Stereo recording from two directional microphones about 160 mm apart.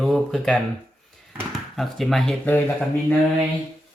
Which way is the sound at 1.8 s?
Centre (ahead or behind).